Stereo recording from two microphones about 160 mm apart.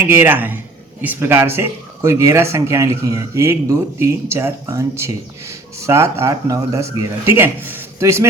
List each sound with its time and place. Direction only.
0.1 s speech: 15° right (ahead or behind)